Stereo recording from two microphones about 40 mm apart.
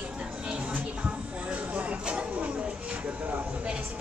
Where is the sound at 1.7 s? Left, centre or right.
Right.